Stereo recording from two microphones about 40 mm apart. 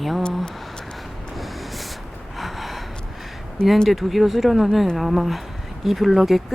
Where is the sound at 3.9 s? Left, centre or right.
Centre.